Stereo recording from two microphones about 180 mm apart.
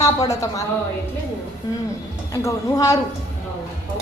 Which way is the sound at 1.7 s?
20° left (ahead or behind).